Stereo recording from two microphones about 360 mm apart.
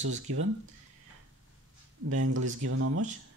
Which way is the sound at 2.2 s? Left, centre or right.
Right.